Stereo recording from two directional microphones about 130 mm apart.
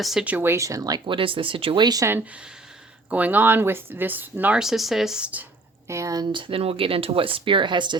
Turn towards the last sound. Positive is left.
turn(degrees=-35)  # may be behind; listen again after turning